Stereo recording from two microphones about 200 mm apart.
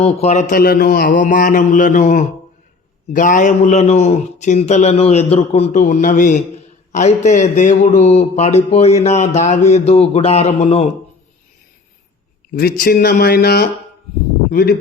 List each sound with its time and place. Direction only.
0.0 s a man's voice: 30° left (ahead or behind)
12.5 s speech: 50° left (ahead or behind)